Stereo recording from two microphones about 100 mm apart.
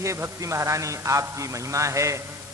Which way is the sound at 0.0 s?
30° right (ahead or behind).